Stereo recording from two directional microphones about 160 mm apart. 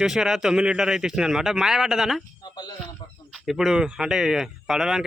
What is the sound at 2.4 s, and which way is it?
Speech, 25° left (ahead or behind).